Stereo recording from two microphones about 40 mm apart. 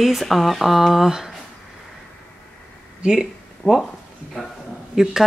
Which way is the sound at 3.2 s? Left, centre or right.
Centre.